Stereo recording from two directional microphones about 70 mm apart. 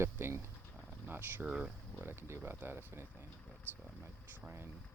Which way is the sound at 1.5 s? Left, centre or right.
Centre.